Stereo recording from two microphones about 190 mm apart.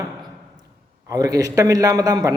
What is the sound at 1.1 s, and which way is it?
A man's voice, 20° right (ahead or behind).